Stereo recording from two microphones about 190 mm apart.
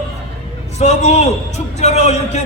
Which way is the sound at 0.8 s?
35° left (ahead or behind).